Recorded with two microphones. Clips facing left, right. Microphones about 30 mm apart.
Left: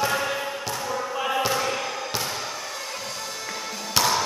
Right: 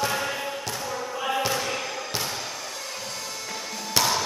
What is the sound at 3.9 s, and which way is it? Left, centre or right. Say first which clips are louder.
Music: left 2 dB; centre.